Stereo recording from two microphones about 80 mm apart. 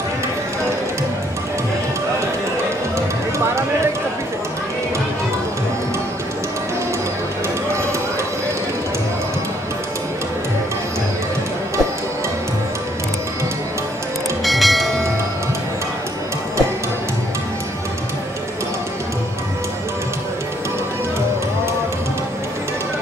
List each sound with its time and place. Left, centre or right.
3.3 s run: right
14.4 s bell: centre